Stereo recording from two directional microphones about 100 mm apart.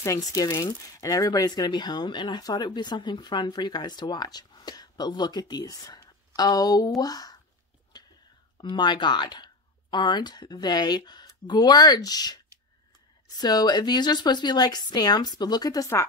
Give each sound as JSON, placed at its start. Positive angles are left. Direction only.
{"t": 0.0, "sound": "speech", "side_deg": 35}
{"t": 8.5, "sound": "speech", "side_deg": 50}
{"t": 13.4, "sound": "speech", "side_deg": 40}